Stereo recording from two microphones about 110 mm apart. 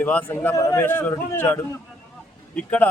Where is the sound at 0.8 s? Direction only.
20° left (ahead or behind).